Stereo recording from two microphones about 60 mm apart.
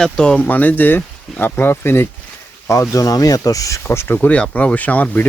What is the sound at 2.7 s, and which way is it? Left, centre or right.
Speech, left.